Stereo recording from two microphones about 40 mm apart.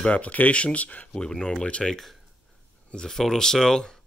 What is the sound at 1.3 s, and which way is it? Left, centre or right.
Speech, centre.